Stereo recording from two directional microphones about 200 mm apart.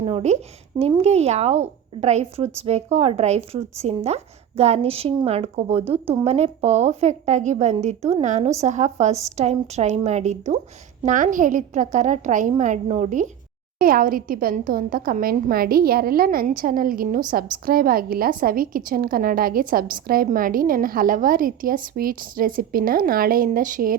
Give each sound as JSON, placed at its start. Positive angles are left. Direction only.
{"t": 0.0, "sound": "a woman's voice", "side_deg": -30}